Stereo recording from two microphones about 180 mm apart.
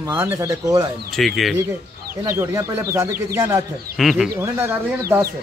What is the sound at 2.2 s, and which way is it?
Speech, 15° right (ahead or behind).